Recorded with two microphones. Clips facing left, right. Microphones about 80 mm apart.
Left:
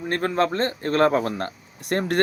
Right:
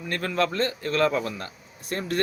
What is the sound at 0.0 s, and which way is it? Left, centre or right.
Speech, left.